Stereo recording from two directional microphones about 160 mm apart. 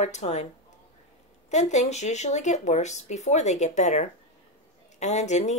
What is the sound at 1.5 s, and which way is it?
Speech, 45° left (ahead or behind).